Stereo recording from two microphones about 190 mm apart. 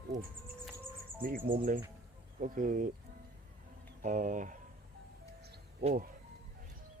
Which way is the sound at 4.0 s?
40° right (ahead or behind).